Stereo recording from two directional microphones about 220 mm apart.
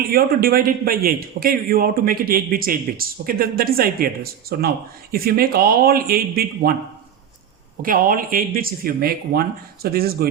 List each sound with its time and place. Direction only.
0.0 s a man's voice: 45° right (ahead or behind)
7.8 s a man's voice: 40° right (ahead or behind)